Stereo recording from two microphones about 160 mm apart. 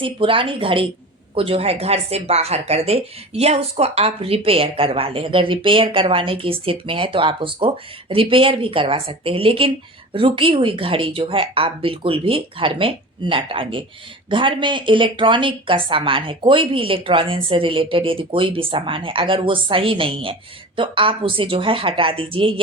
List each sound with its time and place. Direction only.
0.0 s a woman's voice: 35° right (ahead or behind)